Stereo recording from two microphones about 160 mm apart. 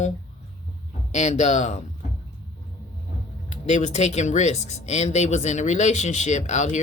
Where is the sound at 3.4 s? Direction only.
45° left (ahead or behind).